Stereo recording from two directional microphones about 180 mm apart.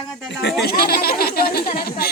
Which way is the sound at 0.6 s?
60° left (ahead or behind).